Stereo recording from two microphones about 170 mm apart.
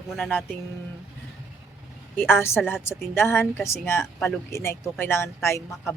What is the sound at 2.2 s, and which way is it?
Speech, 15° left (ahead or behind).